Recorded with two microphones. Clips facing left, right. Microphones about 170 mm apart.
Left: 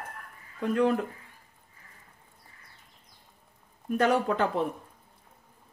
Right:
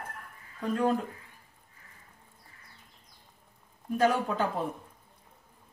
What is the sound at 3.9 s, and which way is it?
Speech, 65° left (ahead or behind).